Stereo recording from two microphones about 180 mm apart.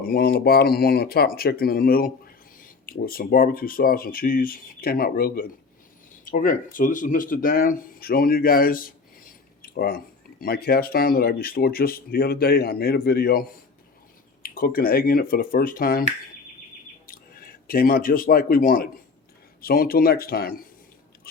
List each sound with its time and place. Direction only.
0.0 s speech: 60° left (ahead or behind)
14.4 s speech: 55° left (ahead or behind)
17.1 s speech: 55° left (ahead or behind)